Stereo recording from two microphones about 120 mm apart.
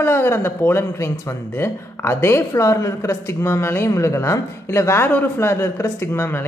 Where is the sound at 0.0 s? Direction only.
20° left (ahead or behind).